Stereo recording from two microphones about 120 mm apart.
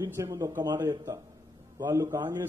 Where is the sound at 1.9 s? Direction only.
20° right (ahead or behind).